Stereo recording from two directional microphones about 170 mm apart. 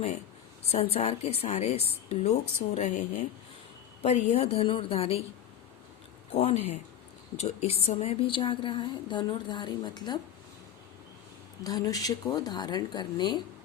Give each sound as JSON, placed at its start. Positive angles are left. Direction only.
{"t": 0.7, "sound": "a woman's voice", "side_deg": 35}
{"t": 6.3, "sound": "a woman's voice", "side_deg": 40}
{"t": 11.6, "sound": "a woman's voice", "side_deg": 20}